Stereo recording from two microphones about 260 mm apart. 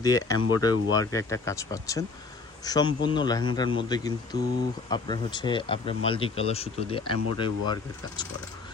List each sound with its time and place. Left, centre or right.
0.0 s speech: centre